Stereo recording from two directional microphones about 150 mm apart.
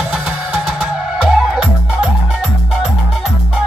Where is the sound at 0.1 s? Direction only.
5° right (ahead or behind).